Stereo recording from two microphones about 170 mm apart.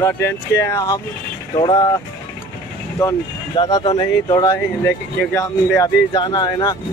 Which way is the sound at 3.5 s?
25° left (ahead or behind).